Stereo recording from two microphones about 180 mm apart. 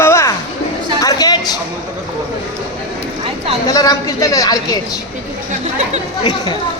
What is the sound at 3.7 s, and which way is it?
A woman's voice, 20° left (ahead or behind).